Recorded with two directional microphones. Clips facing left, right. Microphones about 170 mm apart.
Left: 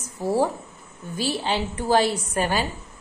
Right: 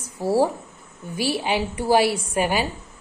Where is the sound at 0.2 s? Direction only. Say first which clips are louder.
Right 2 dB; 10° right (ahead or behind).